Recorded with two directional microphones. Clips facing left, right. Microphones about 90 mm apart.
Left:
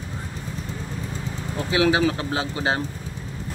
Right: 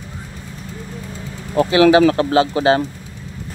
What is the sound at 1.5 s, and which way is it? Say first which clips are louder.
Speech: right 9 dB; 75° right (ahead or behind).